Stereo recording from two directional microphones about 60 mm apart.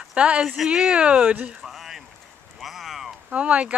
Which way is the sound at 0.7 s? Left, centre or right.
Centre.